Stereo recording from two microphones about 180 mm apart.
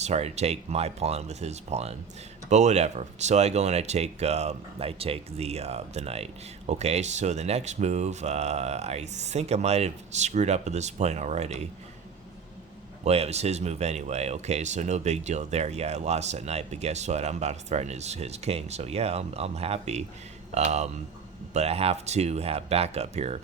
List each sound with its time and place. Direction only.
0.0 s speech: 40° right (ahead or behind)
13.1 s speech: 35° right (ahead or behind)